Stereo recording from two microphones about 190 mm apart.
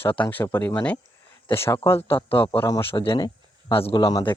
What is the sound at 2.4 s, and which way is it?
Speech, 25° left (ahead or behind).